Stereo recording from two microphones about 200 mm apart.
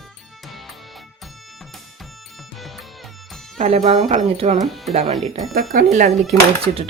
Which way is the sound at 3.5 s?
35° right (ahead or behind).